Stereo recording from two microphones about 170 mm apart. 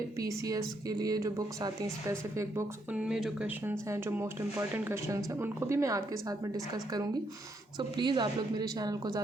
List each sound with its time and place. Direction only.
0.2 s a woman's voice: 20° right (ahead or behind)
2.9 s speech: 5° right (ahead or behind)
3.6 s a woman's voice: 15° right (ahead or behind)